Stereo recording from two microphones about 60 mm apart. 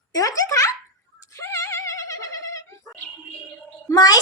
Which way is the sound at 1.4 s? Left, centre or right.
Left.